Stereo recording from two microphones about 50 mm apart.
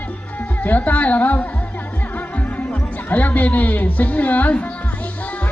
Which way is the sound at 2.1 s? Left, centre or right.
Left.